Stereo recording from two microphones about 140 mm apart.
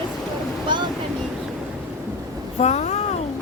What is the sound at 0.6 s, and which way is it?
Ocean, 35° right (ahead or behind).